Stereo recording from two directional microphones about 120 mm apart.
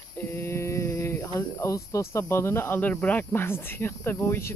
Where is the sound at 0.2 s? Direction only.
20° left (ahead or behind).